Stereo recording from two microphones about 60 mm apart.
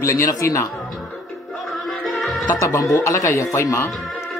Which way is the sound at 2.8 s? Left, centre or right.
Left.